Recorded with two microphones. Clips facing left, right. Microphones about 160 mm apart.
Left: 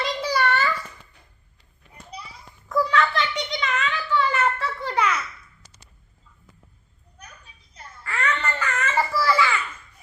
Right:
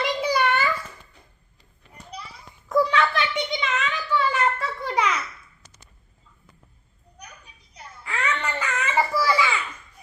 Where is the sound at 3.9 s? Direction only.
5° right (ahead or behind).